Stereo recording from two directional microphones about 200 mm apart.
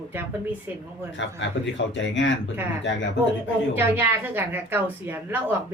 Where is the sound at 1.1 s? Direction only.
65° left (ahead or behind).